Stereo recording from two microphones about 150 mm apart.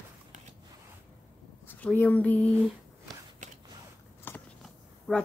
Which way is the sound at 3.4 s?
55° right (ahead or behind).